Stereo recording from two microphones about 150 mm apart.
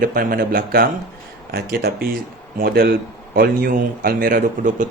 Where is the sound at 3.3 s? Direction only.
80° right.